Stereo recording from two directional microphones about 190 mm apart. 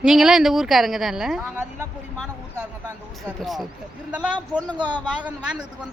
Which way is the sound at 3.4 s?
Centre (ahead or behind).